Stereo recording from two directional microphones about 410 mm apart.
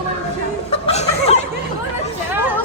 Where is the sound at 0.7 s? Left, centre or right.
Centre.